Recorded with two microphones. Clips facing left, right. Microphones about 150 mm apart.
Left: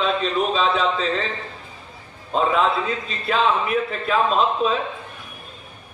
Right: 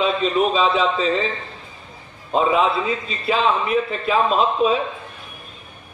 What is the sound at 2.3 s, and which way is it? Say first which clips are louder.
A man's voice: right 2 dB; 5° right (ahead or behind).